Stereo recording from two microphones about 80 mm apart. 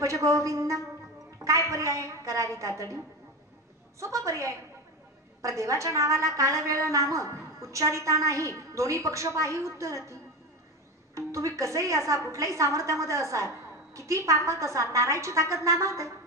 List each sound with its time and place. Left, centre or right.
0.0 s a woman's voice: right
4.0 s a woman's voice: right
11.1 s a woman's voice: right